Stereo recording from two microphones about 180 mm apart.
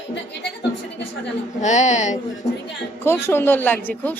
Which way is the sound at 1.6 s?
40° left (ahead or behind).